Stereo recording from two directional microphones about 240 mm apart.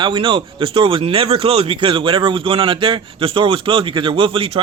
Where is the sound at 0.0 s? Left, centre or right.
Centre.